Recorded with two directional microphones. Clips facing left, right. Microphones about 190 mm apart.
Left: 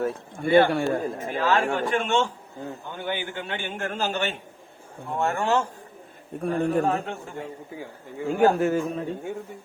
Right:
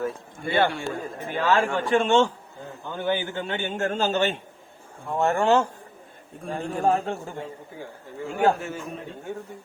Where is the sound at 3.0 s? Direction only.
45° right (ahead or behind).